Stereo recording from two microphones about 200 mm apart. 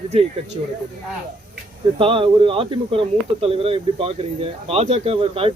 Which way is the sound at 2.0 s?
25° right (ahead or behind).